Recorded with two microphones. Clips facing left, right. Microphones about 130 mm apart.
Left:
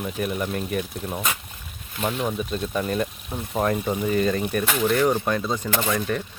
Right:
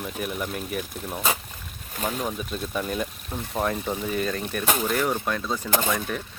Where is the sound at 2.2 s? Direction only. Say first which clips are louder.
Left 4 dB; centre (ahead or behind).